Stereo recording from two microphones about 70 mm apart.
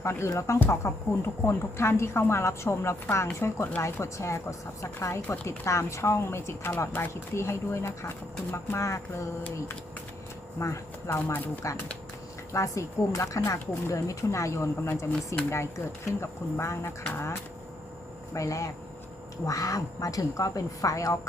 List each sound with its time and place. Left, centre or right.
0.0 s a woman's voice: left
7.1 s a woman's voice: left
10.6 s a woman's voice: left
18.3 s speech: left